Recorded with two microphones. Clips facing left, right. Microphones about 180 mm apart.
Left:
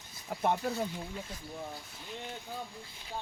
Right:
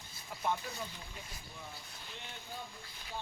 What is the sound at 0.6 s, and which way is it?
Speech, 60° left (ahead or behind).